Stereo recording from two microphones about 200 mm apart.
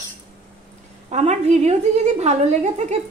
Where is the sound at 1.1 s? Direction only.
35° right (ahead or behind).